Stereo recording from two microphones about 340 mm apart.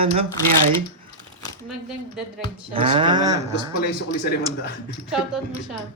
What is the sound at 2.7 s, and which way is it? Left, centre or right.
Speech, centre.